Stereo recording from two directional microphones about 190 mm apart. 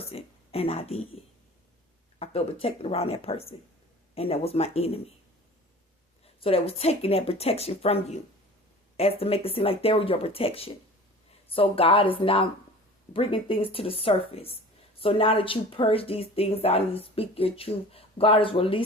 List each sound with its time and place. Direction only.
0.0 s speech: 30° left (ahead or behind)
6.2 s speech: 30° left (ahead or behind)